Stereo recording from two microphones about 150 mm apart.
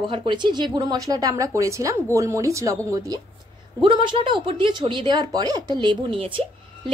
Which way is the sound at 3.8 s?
35° right (ahead or behind).